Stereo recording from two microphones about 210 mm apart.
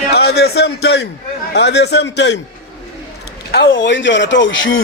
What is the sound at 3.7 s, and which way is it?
Speech, 60° left (ahead or behind).